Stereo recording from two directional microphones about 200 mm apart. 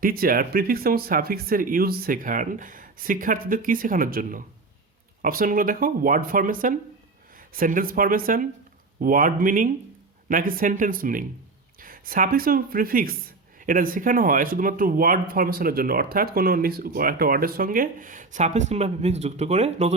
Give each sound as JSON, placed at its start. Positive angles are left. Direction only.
{"t": 0.0, "sound": "speech", "side_deg": -45}